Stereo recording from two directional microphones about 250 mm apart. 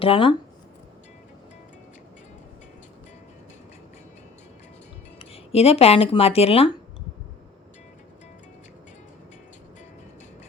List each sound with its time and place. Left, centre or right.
0.0 s speech: left
5.2 s speech: left